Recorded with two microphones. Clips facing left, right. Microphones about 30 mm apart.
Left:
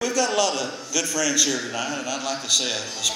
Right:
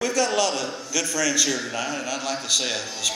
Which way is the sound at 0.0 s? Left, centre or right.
Right.